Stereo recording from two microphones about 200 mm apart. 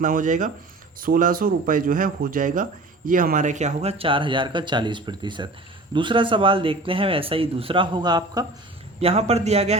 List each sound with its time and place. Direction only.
0.0 s a man's voice: 40° right (ahead or behind); by 8.4 s 20° right (ahead or behind)
9.0 s a man's voice: 30° right (ahead or behind)